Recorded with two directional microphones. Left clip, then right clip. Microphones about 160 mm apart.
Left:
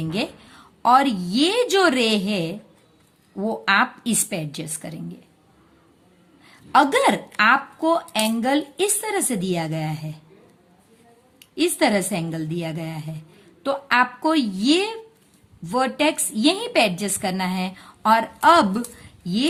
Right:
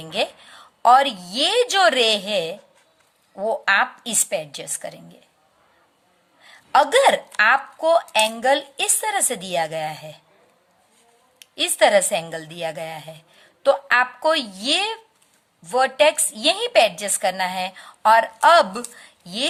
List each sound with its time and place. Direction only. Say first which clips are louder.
0.0 s speech: right 3 dB; 30° right (ahead or behind)
6.4 s speech: even; 25° right (ahead or behind)
11.3 s a woman's voice: right 3 dB; 30° right (ahead or behind)